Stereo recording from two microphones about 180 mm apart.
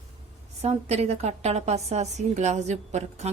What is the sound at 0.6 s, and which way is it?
A woman's voice, 35° right (ahead or behind).